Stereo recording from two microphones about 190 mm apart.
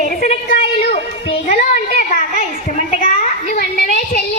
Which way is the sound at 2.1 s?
40° left (ahead or behind).